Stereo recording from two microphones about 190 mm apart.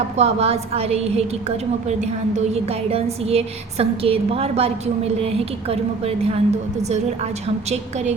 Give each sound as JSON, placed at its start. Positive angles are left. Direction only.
{"t": 0.2, "sound": "speech", "side_deg": -35}
{"t": 7.4, "sound": "speech", "side_deg": -35}